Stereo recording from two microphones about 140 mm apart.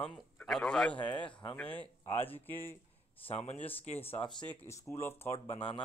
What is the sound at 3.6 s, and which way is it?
Speech, 45° left (ahead or behind).